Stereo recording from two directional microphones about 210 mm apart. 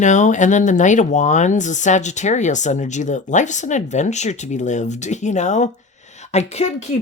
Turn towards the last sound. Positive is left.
turn(degrees=30)  # may be behind; listen again after turning